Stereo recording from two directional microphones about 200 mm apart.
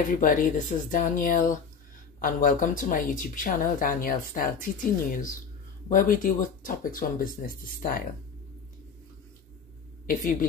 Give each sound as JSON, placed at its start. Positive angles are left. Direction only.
{"t": 0.1, "sound": "speech", "side_deg": 40}